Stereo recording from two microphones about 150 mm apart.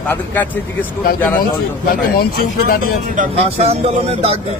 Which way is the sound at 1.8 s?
85° left.